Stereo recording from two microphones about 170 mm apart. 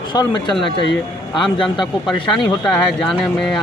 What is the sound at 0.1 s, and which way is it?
Speech, 25° left (ahead or behind).